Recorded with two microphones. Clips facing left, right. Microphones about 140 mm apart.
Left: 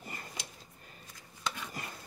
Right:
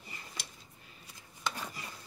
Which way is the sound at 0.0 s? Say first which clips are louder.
Left 5 dB; 50° left (ahead or behind).